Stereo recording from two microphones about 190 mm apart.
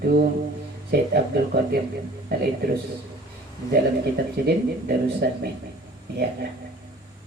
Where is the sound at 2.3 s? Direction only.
55° right (ahead or behind).